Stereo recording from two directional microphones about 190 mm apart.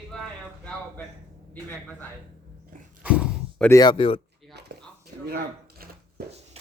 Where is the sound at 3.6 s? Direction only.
15° left (ahead or behind).